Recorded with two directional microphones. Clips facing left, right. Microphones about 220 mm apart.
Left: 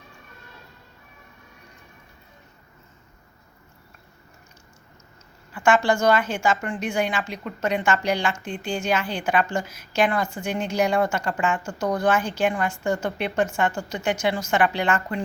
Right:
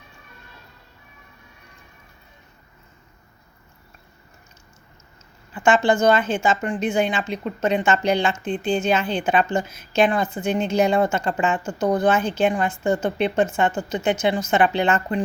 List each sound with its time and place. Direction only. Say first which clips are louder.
5.5 s a woman's voice: right 2 dB; 20° right (ahead or behind)